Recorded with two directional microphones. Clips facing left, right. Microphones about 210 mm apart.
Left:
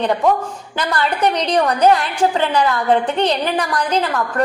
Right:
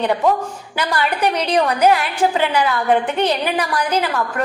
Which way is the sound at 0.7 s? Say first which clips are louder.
Left 1 dB; 10° right (ahead or behind).